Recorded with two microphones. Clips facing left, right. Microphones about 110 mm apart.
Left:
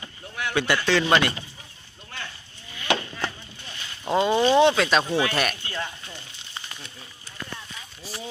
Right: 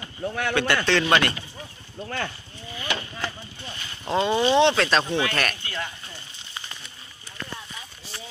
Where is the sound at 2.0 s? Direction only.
60° right (ahead or behind).